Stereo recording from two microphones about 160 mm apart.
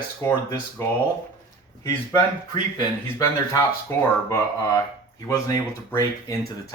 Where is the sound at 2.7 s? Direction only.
20° left (ahead or behind).